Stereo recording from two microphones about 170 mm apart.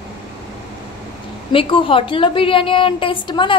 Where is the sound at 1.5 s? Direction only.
30° left (ahead or behind).